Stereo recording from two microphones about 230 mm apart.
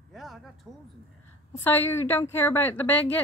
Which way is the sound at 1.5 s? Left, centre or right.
Centre.